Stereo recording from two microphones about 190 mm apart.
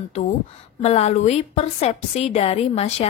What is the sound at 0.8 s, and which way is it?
A woman's voice, 35° left (ahead or behind).